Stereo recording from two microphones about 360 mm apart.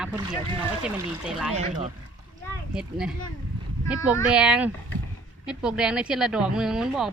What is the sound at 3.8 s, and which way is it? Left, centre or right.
Speech, centre.